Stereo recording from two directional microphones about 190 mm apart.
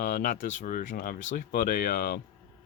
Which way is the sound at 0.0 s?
45° left (ahead or behind).